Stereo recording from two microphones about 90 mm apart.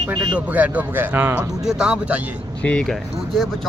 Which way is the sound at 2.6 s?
15° left (ahead or behind).